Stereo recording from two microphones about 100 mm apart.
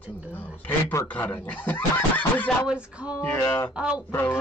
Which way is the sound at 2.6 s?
10° right (ahead or behind).